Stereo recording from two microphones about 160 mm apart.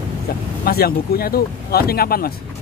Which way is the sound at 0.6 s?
70° left (ahead or behind).